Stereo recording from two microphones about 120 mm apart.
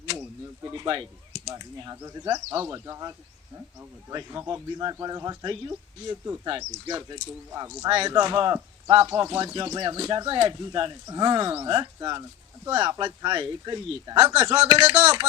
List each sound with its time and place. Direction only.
0.7 s speech: 35° right (ahead or behind)
4.3 s speech: 20° right (ahead or behind)
7.9 s speech: 40° right (ahead or behind)
14.6 s speech: 55° right (ahead or behind)